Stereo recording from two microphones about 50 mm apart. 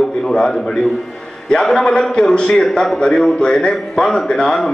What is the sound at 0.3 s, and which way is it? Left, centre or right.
A man's voice, centre.